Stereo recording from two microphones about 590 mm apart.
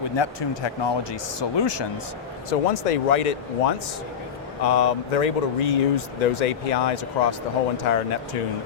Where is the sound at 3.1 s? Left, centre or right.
Left.